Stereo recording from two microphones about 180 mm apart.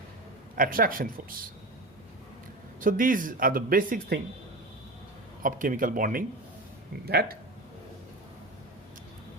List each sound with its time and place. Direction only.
0.5 s speech: 50° right (ahead or behind)
2.8 s speech: 50° right (ahead or behind)
5.4 s speech: 50° right (ahead or behind)